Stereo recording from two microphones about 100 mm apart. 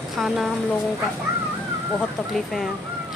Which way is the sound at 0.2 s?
Centre (ahead or behind).